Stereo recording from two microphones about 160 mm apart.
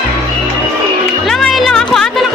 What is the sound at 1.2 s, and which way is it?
Music, centre (ahead or behind).